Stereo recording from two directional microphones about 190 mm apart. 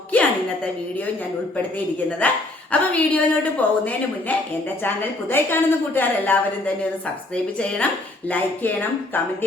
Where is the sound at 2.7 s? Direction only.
10° left (ahead or behind).